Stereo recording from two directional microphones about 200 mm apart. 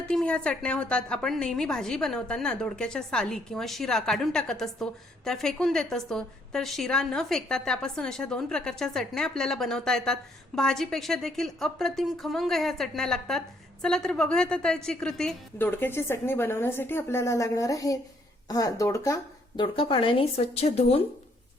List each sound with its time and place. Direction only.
0.1 s a woman's voice: 5° left (ahead or behind)
19.5 s a woman's voice: 25° left (ahead or behind)